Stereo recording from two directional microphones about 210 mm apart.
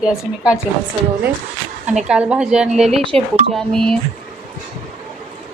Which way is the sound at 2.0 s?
5° right (ahead or behind).